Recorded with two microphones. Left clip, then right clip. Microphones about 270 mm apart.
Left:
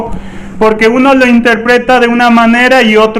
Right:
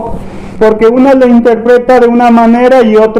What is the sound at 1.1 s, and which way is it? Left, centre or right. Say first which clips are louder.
A man's voice: right 1 dB; left.